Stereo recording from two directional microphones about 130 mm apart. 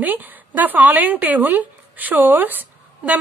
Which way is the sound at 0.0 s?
15° right (ahead or behind).